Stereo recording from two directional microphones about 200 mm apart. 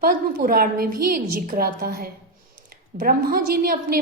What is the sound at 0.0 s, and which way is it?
A woman's voice, 45° right (ahead or behind).